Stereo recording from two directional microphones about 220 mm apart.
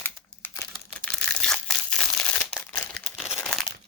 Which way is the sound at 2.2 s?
5° left (ahead or behind).